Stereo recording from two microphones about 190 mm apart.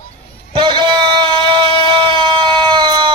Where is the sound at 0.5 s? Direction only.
25° right (ahead or behind).